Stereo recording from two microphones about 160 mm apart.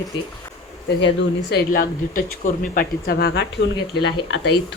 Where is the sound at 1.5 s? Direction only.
70° left (ahead or behind).